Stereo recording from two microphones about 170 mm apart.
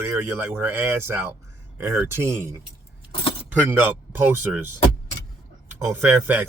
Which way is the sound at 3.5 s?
10° right (ahead or behind).